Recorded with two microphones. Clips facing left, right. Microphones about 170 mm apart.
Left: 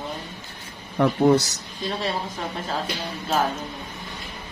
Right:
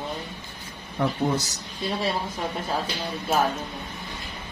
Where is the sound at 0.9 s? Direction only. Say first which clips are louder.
Left 7 dB; 75° left (ahead or behind).